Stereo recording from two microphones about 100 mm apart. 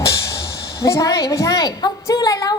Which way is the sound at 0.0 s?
30° left (ahead or behind).